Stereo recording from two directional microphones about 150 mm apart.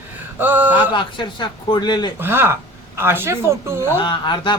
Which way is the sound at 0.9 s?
30° left (ahead or behind).